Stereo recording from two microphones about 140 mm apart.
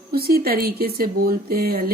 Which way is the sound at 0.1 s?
90° right.